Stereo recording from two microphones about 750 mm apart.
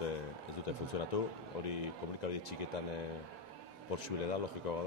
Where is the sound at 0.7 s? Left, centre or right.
Left.